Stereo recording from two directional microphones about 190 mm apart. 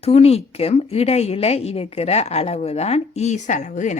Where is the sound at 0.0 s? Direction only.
35° left (ahead or behind).